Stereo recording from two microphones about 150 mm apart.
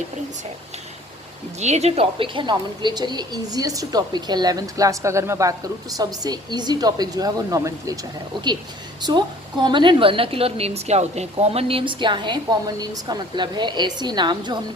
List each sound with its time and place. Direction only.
1.5 s a woman's voice: 50° right (ahead or behind); by 7.9 s 20° right (ahead or behind)
9.0 s a woman's voice: 30° right (ahead or behind)